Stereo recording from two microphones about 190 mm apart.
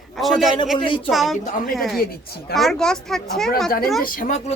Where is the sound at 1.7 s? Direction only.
Centre (ahead or behind).